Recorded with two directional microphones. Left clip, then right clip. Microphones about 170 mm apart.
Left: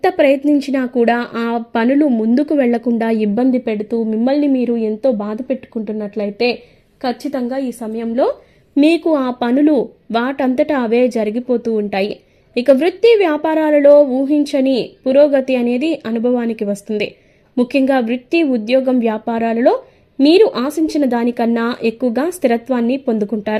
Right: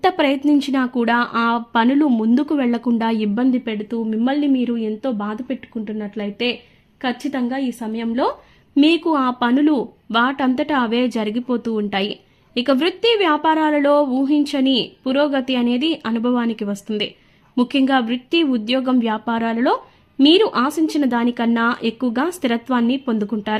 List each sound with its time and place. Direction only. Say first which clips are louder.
0.0 s speech: left 4 dB; centre (ahead or behind)